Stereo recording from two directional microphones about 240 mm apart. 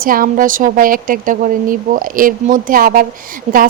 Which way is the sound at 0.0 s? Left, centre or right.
Right.